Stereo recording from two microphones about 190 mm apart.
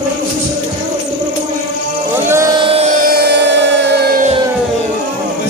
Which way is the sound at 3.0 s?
55° right (ahead or behind).